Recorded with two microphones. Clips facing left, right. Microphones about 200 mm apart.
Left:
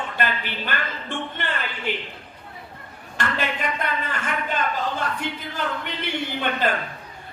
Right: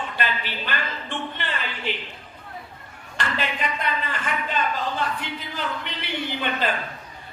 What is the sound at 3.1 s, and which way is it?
Speech, 50° left (ahead or behind).